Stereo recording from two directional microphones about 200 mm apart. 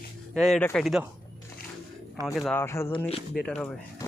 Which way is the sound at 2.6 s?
10° left (ahead or behind).